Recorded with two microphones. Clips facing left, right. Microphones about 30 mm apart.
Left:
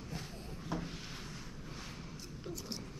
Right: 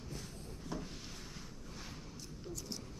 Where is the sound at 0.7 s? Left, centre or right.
Centre.